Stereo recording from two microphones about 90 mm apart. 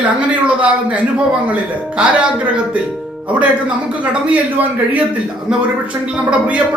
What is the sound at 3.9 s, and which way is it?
A man's voice, 15° right (ahead or behind).